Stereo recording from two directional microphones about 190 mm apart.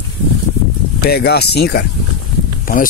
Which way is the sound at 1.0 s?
55° left (ahead or behind).